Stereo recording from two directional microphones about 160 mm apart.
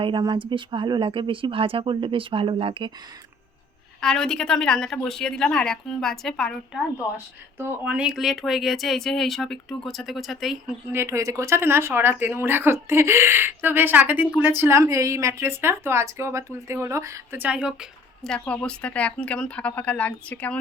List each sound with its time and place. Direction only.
0.0 s speech: 30° right (ahead or behind)
4.0 s speech: 5° left (ahead or behind)
10.9 s a woman's voice: 15° right (ahead or behind); by 20.6 s 10° left (ahead or behind)